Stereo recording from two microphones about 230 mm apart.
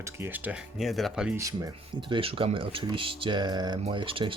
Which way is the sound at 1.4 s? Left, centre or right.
Centre.